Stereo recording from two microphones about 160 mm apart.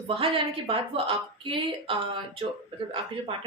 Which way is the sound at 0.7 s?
35° right (ahead or behind).